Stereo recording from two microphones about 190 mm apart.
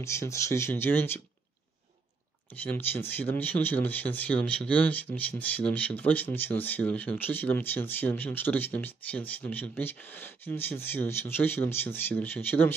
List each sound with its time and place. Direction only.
0.0 s speech: 15° left (ahead or behind)
2.5 s speech: 10° left (ahead or behind)